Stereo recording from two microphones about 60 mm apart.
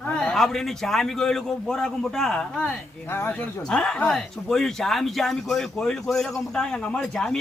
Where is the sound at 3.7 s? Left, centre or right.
Centre.